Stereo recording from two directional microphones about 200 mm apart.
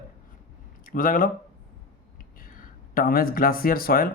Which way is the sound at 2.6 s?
45° left (ahead or behind).